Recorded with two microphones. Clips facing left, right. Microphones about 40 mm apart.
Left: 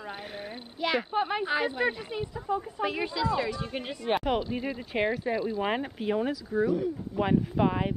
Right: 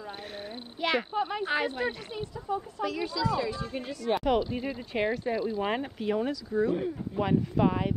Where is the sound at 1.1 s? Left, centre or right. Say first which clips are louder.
Left 2 dB; left.